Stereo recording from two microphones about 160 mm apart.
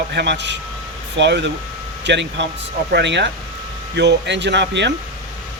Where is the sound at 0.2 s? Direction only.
90° right.